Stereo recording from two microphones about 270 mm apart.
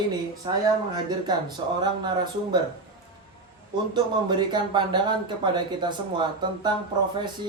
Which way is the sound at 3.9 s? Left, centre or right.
Centre.